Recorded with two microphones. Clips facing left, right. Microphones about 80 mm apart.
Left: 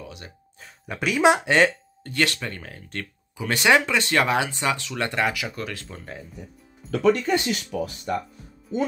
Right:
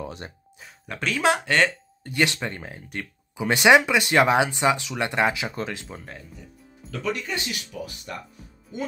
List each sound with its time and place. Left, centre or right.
0.0 s speech: right
0.8 s speech: centre
2.0 s speech: centre
5.9 s speech: centre
6.9 s speech: left